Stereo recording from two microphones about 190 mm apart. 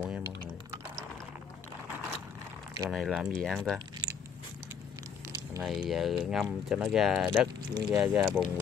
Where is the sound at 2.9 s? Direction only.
5° right (ahead or behind).